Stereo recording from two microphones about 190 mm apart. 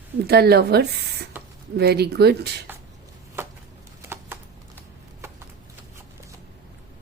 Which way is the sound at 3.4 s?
10° right (ahead or behind).